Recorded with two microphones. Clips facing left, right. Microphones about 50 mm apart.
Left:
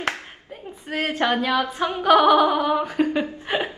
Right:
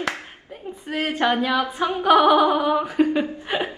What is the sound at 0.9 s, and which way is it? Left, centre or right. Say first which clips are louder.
A woman's voice: right 1 dB; centre.